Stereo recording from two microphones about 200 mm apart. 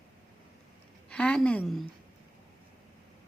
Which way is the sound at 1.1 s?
5° left (ahead or behind).